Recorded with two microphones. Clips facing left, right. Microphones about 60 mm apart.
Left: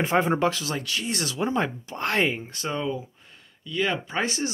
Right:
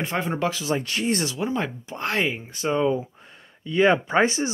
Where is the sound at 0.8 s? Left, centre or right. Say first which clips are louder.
Right 5 dB; right.